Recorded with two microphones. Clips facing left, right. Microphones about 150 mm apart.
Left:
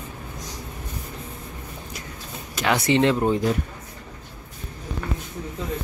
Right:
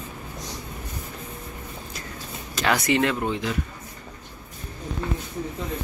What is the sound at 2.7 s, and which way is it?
Speech, 30° left (ahead or behind).